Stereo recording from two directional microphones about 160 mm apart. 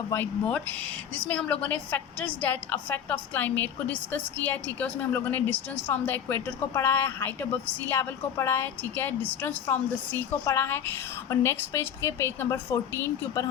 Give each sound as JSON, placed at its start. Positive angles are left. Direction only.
{"t": 0.1, "sound": "a woman's voice", "side_deg": 10}